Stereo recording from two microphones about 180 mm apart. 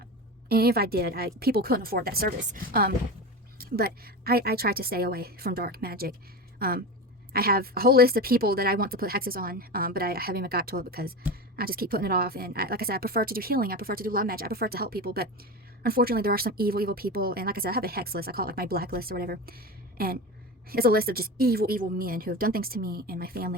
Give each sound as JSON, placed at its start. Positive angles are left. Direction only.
{"t": 0.4, "sound": "a woman's voice", "side_deg": -60}